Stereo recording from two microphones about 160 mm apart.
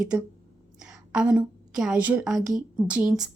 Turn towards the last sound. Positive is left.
turn(degrees=-5)  # may be behind; listen again after turning